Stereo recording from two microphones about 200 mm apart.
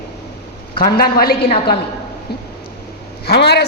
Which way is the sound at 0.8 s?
50° left (ahead or behind).